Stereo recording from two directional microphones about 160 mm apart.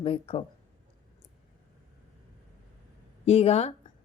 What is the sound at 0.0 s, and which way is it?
Speech, 35° left (ahead or behind).